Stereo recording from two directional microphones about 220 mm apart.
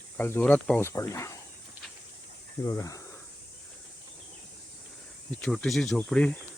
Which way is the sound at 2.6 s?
15° left (ahead or behind).